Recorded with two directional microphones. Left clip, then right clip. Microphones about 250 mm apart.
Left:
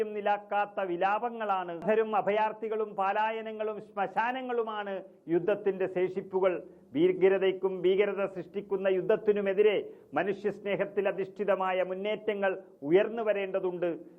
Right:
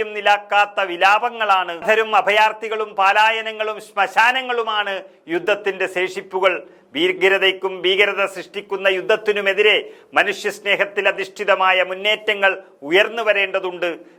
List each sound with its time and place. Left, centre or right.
0.0 s a man's voice: centre